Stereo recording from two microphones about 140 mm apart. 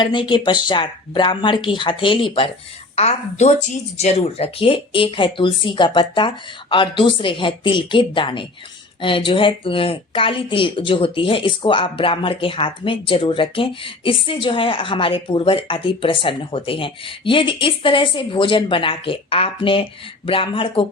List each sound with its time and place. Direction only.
0.0 s a woman's voice: 35° left (ahead or behind)
2.9 s a woman's voice: 50° left (ahead or behind)